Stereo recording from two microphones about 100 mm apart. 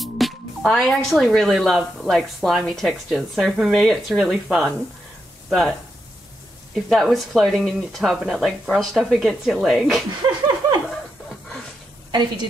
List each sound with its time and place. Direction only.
0.0 s speech: 5° left (ahead or behind)
10.2 s laughter: 40° right (ahead or behind)